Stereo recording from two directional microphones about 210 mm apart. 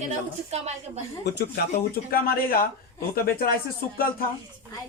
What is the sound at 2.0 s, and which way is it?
Speech, 45° left (ahead or behind).